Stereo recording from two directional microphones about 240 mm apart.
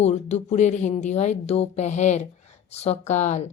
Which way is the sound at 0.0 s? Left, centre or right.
Left.